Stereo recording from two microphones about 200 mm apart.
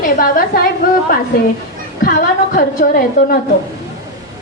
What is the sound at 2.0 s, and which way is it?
A woman's voice, 45° left (ahead or behind).